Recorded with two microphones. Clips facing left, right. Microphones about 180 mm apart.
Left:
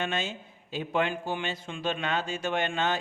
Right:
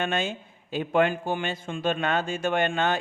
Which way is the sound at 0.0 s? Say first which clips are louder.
Right 4 dB; 55° right (ahead or behind).